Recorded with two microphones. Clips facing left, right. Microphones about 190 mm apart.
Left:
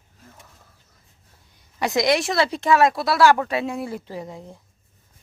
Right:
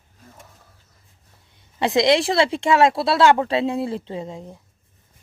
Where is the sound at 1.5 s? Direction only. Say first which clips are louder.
Right 3 dB; 25° right (ahead or behind).